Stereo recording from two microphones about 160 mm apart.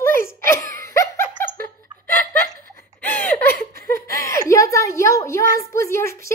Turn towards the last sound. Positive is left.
turn(degrees=15)  # may be behind; listen again after turning